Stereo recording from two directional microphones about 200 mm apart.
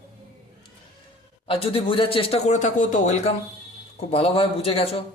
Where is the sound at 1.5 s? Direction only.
25° left (ahead or behind).